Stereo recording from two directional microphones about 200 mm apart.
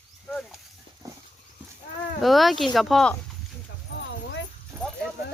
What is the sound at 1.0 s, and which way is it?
Horse, 15° right (ahead or behind).